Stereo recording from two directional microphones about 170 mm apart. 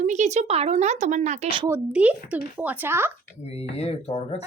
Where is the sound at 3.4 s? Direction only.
35° left (ahead or behind).